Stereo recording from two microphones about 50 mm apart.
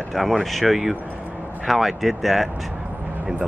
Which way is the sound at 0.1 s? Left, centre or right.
Centre.